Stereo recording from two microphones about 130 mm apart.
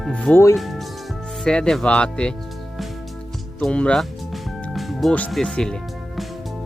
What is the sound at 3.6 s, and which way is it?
Speech, 10° left (ahead or behind).